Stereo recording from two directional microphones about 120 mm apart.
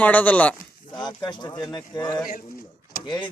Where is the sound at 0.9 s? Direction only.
40° left (ahead or behind).